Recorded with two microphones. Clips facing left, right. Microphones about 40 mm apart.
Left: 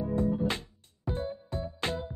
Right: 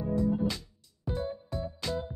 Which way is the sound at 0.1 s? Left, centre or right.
Left.